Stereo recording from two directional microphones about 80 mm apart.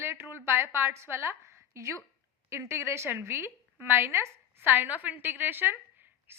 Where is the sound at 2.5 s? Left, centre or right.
Right.